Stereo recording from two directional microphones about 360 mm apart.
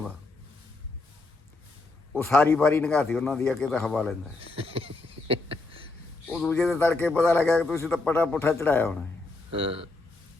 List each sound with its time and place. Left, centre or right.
2.1 s a man's voice: centre
4.5 s a sound: centre
6.2 s a man's voice: centre
9.5 s speech: centre